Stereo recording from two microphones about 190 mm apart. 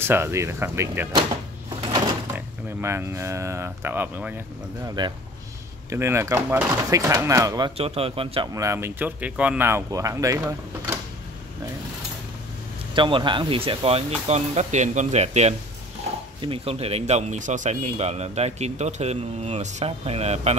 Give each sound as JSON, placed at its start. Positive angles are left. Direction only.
{"t": 0.0, "sound": "speech", "side_deg": -10}
{"t": 1.8, "sound": "a sound", "side_deg": -30}
{"t": 2.3, "sound": "speech", "side_deg": -10}
{"t": 4.8, "sound": "speech", "side_deg": -25}
{"t": 7.7, "sound": "speech", "side_deg": -30}
{"t": 8.5, "sound": "speech", "side_deg": -15}
{"t": 12.9, "sound": "speech", "side_deg": -25}